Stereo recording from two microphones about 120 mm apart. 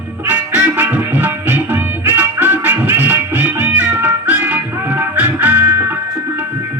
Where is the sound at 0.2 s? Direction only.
15° right (ahead or behind).